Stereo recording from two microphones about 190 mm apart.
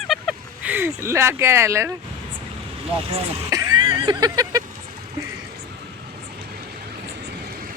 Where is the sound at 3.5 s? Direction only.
20° right (ahead or behind).